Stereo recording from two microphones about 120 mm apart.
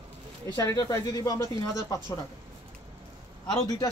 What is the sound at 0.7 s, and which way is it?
Speech, 30° left (ahead or behind).